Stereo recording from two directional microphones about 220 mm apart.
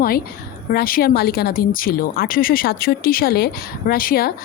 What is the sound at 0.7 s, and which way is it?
Speech, 45° left (ahead or behind).